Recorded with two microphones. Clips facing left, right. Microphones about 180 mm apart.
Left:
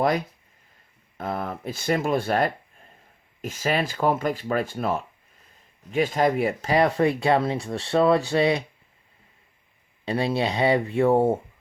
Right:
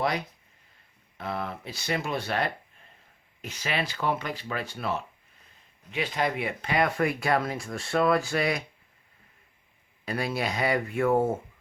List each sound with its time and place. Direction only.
1.2 s speech: 45° left (ahead or behind); by 8.6 s 30° left (ahead or behind)
10.1 s speech: 25° left (ahead or behind)